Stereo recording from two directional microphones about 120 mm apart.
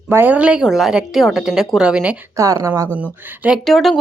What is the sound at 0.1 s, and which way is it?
Speech, 15° right (ahead or behind).